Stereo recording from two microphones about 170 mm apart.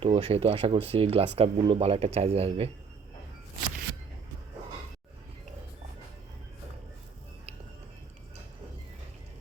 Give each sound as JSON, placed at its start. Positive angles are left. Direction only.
{"t": 0.0, "sound": "speech", "side_deg": -35}